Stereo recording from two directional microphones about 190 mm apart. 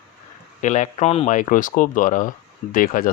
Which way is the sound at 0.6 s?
40° left (ahead or behind).